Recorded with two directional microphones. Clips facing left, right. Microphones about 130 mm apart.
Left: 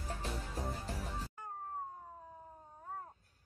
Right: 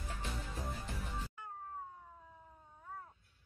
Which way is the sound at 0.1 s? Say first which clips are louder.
Left 3 dB; 35° left (ahead or behind).